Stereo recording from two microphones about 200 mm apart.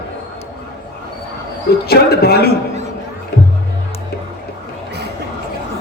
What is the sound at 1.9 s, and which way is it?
Speech, 50° left (ahead or behind).